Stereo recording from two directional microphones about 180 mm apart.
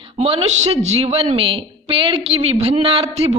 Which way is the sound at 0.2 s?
35° right (ahead or behind).